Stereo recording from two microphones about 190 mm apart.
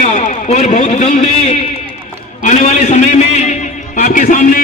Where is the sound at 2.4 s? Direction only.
40° left (ahead or behind).